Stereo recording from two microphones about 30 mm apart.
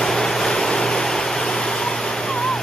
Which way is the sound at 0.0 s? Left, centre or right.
Centre.